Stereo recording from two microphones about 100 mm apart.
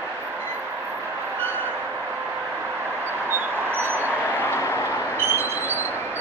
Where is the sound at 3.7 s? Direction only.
20° right (ahead or behind).